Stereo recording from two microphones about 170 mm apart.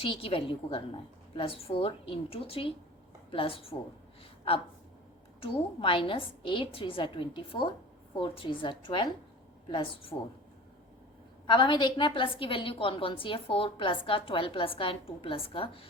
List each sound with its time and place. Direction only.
0.0 s a woman's voice: 30° left (ahead or behind)
5.4 s a woman's voice: 30° left (ahead or behind)
11.4 s a woman's voice: 25° left (ahead or behind)